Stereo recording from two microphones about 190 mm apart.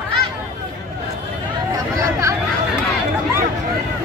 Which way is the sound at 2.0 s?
15° right (ahead or behind).